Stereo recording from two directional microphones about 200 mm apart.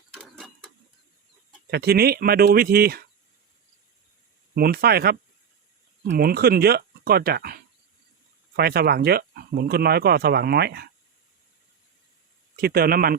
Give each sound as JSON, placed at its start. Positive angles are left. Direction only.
{"t": 0.1, "sound": "mechanisms", "side_deg": 5}
{"t": 1.7, "sound": "speech", "side_deg": -50}
{"t": 4.5, "sound": "speech", "side_deg": -50}
{"t": 12.5, "sound": "speech", "side_deg": -50}